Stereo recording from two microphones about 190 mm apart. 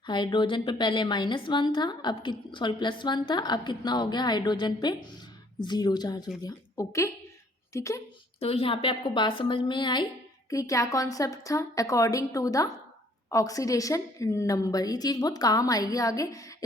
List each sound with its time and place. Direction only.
0.0 s a woman's voice: 25° left (ahead or behind)
8.4 s a woman's voice: 30° left (ahead or behind)